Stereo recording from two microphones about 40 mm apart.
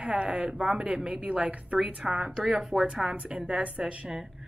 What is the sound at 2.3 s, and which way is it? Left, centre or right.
Speech, centre.